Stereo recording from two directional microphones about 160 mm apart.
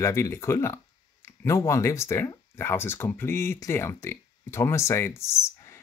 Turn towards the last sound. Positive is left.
turn(degrees=15)  # may be behind; listen again after turning